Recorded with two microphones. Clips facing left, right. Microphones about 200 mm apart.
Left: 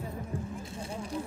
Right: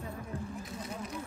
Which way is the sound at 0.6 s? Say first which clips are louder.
Left 2 dB; 30° left (ahead or behind).